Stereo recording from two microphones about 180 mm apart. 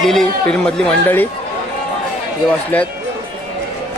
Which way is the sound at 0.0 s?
Centre (ahead or behind).